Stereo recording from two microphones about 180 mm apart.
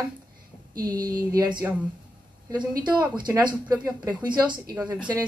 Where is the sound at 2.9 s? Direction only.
25° right (ahead or behind).